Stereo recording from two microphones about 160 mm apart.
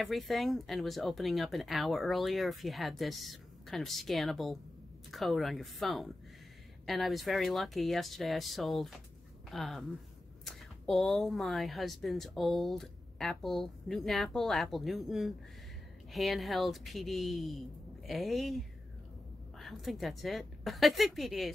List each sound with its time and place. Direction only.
0.0 s speech: centre (ahead or behind)
19.6 s speech: centre (ahead or behind)